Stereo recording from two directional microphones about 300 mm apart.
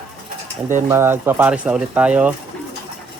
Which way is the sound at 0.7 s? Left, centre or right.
Centre.